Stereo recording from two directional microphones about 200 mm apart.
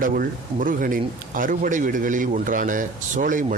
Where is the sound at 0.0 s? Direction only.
45° right (ahead or behind).